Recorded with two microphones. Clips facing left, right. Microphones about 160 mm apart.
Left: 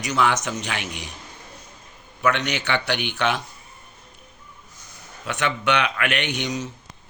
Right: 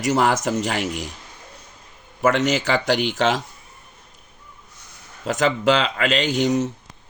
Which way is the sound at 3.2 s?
90° right.